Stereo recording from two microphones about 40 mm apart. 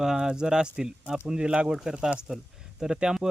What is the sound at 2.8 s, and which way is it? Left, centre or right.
Speech, centre.